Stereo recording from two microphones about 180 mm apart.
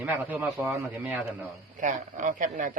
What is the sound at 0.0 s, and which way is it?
A man's voice, 10° right (ahead or behind).